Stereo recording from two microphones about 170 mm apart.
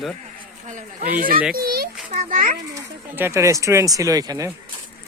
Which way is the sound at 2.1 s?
50° right (ahead or behind).